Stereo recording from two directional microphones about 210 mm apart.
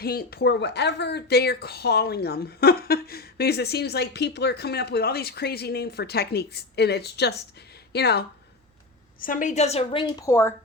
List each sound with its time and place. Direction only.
0.0 s speech: 45° left (ahead or behind)
9.2 s a woman's voice: 40° left (ahead or behind); by 10.5 s 15° left (ahead or behind)